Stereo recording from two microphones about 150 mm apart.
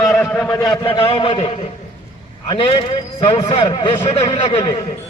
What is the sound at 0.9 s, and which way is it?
A man's voice, 35° left (ahead or behind).